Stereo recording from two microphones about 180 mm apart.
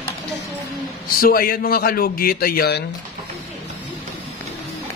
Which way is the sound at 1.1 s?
55° left (ahead or behind).